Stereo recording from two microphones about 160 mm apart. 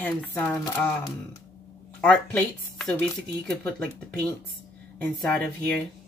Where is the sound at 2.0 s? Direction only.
10° left (ahead or behind).